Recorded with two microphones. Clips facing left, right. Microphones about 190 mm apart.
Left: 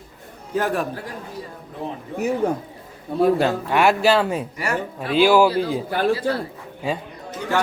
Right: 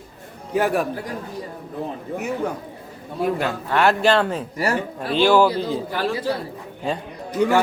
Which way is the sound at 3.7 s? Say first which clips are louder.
Right 1 dB; 10° left (ahead or behind).